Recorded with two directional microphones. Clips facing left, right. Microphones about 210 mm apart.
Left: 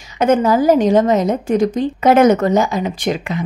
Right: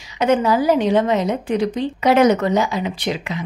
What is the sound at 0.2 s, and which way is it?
A woman's voice, 45° left (ahead or behind).